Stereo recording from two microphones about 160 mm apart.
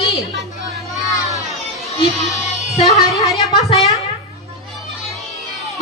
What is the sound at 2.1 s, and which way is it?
Child singing, centre (ahead or behind).